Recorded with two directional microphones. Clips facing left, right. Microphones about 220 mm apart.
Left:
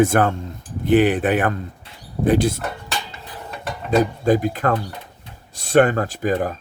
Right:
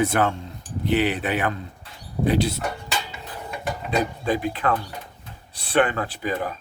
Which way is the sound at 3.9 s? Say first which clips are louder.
Left 7 dB; 45° left (ahead or behind).